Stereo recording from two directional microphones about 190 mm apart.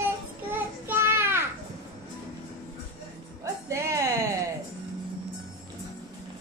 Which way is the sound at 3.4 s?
15° right (ahead or behind).